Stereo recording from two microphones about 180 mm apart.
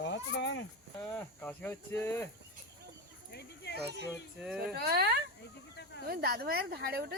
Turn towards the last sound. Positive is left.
turn(degrees=-60)  # may be behind; listen again after turning